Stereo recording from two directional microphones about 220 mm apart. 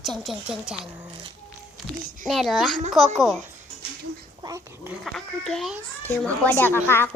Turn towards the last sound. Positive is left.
turn(degrees=10)  # may be behind; listen again after turning